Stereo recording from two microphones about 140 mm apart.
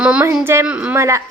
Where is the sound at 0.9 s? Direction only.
20° right (ahead or behind).